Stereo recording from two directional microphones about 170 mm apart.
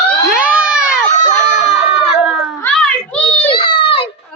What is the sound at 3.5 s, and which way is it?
Baby cry, 30° left (ahead or behind).